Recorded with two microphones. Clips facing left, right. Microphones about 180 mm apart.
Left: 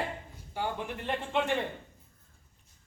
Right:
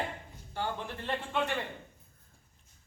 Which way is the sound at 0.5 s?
15° left (ahead or behind).